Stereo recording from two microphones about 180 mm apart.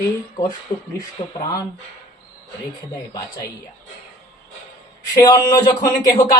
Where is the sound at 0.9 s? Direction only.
20° left (ahead or behind).